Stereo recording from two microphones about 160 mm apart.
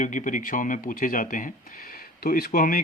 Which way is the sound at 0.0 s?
50° left (ahead or behind).